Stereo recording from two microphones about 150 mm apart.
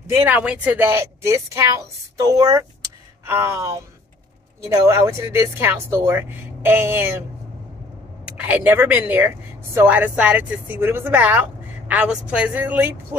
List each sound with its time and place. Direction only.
0.1 s a woman's voice: 15° right (ahead or behind)
8.3 s speech: 10° right (ahead or behind)